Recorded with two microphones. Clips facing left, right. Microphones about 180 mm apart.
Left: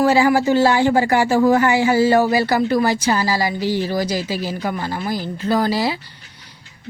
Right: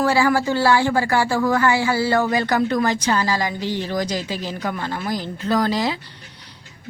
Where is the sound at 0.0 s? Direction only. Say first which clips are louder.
Left 3 dB; 15° left (ahead or behind).